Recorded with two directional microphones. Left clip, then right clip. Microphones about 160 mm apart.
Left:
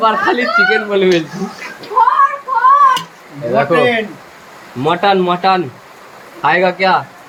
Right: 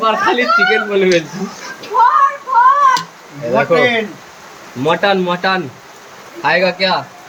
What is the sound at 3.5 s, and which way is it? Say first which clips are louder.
Speech: even; 25° left (ahead or behind).